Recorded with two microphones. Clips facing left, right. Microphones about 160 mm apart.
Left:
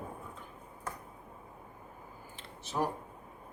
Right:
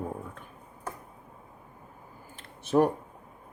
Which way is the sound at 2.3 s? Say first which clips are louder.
Right 11 dB; 55° right (ahead or behind).